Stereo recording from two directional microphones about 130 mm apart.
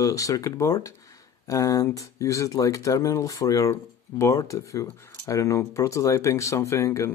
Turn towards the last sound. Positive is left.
turn(degrees=25)  # may be behind; listen again after turning